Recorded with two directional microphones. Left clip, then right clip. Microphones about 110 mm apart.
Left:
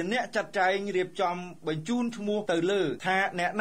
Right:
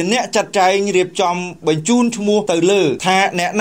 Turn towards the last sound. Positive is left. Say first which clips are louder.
# right 12 dB
turn(degrees=-25)  # may be behind; listen again after turning